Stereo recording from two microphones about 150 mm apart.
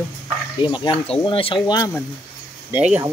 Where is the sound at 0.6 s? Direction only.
30° left (ahead or behind).